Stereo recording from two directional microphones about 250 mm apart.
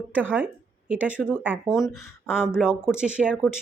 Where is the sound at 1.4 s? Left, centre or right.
Centre.